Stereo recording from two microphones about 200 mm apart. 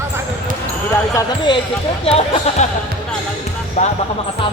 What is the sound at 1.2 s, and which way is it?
Speech, 20° left (ahead or behind).